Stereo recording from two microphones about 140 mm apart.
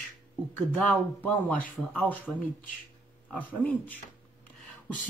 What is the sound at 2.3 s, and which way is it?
Speech, 5° right (ahead or behind).